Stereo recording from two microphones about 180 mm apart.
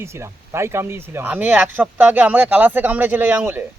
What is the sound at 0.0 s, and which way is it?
Speech, 15° right (ahead or behind).